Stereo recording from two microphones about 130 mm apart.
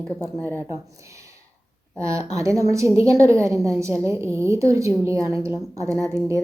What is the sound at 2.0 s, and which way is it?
A woman's voice, 25° right (ahead or behind).